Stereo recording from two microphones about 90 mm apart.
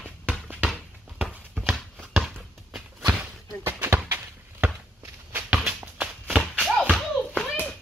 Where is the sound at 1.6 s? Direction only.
Centre (ahead or behind).